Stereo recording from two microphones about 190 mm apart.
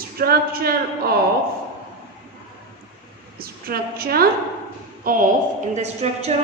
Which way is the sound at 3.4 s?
55° right (ahead or behind).